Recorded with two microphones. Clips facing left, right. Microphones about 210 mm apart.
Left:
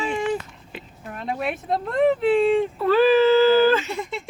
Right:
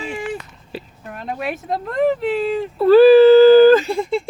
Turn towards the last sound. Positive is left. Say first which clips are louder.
# right 9 dB
turn(degrees=-30)  # may be behind; listen again after turning